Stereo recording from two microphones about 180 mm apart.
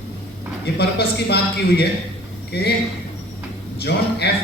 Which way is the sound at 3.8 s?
65° left (ahead or behind).